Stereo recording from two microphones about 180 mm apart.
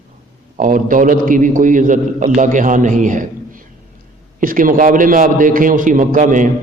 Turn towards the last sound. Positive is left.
turn(degrees=-45)  # may be behind; listen again after turning